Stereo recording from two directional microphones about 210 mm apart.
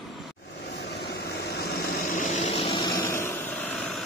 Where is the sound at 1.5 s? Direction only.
50° left (ahead or behind); by 3.2 s 15° left (ahead or behind).